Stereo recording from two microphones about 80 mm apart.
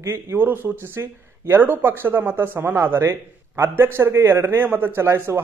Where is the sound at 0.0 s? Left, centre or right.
Right.